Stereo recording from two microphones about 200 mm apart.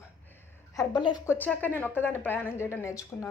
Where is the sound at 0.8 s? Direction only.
20° left (ahead or behind).